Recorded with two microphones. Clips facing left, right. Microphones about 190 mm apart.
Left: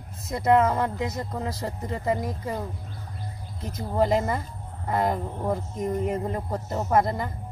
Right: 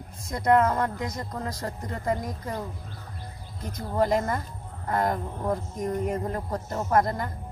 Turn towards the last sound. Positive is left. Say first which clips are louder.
# left 1 dB
turn(degrees=5)  # may be behind; listen again after turning